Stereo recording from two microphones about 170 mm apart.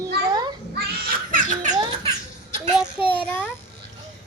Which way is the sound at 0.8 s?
55° right (ahead or behind).